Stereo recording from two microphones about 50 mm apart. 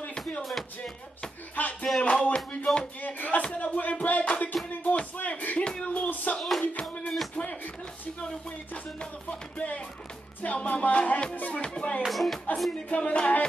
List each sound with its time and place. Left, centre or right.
0.4 s music: centre
1.5 s music: left
3.0 s speech: left
3.4 s music: left
5.6 s a sound: centre
6.0 s a sound: left
6.6 s a sound: left
7.3 s music: left
11.3 s speech: left
11.6 s music: centre
12.1 s speech: centre
12.9 s music: left